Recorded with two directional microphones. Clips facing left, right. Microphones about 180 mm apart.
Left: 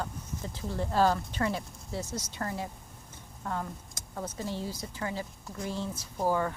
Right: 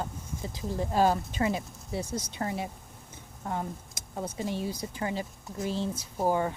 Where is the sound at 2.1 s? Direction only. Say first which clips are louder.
Right 3 dB; 55° right (ahead or behind).